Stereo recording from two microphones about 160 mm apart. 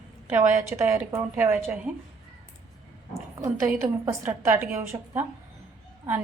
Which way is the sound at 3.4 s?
15° right (ahead or behind).